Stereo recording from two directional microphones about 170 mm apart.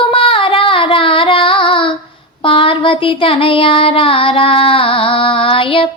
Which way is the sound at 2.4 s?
30° left (ahead or behind).